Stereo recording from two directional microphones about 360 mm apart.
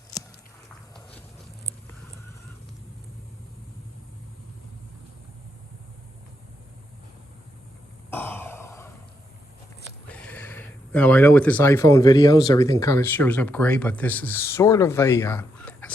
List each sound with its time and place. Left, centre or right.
8.1 s throat clearing: centre
10.1 s speech: centre